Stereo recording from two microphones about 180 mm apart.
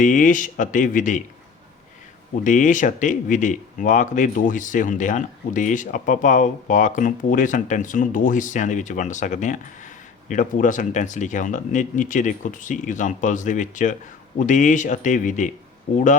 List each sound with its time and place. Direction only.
0.0 s speech: 45° left (ahead or behind)
2.4 s speech: 45° left (ahead or behind)